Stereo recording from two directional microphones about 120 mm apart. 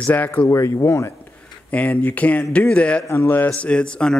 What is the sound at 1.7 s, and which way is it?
Speech, 10° left (ahead or behind).